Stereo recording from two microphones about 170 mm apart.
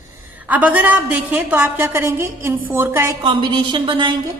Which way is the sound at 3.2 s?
30° right (ahead or behind).